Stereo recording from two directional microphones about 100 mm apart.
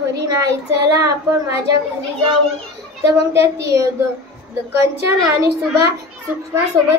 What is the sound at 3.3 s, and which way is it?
A child's voice, 30° right (ahead or behind).